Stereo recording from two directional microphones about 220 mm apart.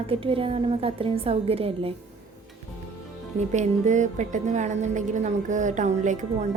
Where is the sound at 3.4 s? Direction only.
30° right (ahead or behind).